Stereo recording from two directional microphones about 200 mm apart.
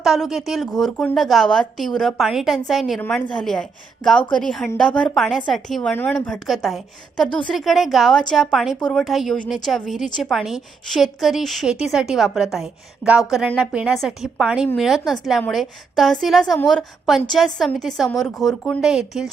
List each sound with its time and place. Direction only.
0.0 s a woman's voice: centre (ahead or behind)